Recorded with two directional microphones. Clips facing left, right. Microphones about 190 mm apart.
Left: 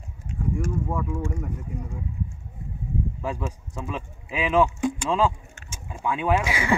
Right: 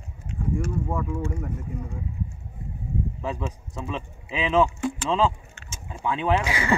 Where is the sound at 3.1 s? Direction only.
10° left (ahead or behind).